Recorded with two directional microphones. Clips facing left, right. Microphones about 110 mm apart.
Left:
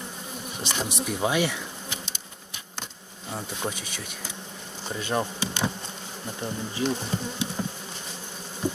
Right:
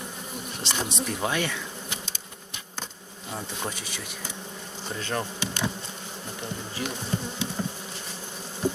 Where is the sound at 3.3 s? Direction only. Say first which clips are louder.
Left 2 dB; centre (ahead or behind).